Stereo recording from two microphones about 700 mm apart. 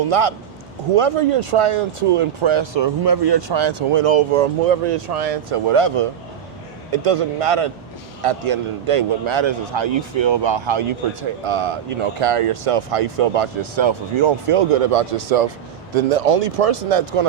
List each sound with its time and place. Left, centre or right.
0.1 s a man's voice: right